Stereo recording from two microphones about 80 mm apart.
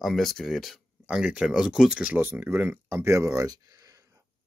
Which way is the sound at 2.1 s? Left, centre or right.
Right.